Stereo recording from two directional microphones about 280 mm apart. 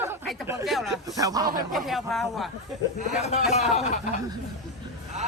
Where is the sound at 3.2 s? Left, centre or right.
Left.